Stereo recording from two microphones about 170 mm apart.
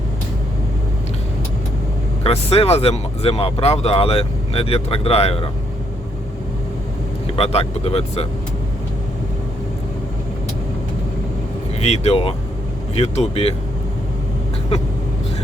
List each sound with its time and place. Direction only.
2.2 s speech: 35° left (ahead or behind)
7.3 s speech: 35° left (ahead or behind)
11.8 s speech: 40° left (ahead or behind)